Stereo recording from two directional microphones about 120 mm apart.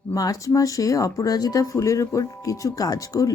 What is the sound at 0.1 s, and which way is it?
Speech, 30° left (ahead or behind).